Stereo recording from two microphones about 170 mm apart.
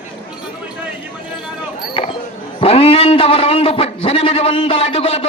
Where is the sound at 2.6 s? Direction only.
35° left (ahead or behind).